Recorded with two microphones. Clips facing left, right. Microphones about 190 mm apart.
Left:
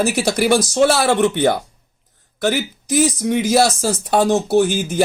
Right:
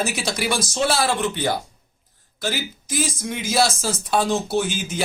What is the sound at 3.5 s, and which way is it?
Speech, 50° left (ahead or behind).